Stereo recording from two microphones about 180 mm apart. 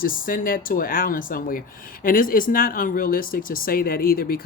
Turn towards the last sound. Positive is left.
turn(degrees=55)  # may be behind; listen again after turning